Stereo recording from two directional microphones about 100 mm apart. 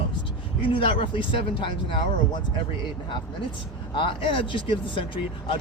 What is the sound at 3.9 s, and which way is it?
Speech, 60° left (ahead or behind).